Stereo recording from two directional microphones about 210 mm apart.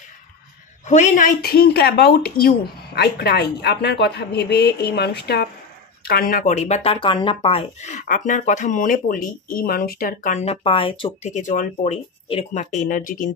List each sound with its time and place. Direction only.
0.8 s speech: 35° left (ahead or behind)